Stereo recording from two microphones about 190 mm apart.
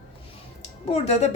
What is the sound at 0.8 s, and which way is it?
Speech, 35° left (ahead or behind).